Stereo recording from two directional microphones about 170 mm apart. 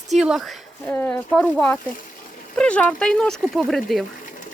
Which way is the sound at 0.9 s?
10° left (ahead or behind).